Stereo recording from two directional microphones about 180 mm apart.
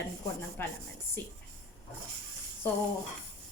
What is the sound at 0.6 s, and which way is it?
Speech, 10° left (ahead or behind).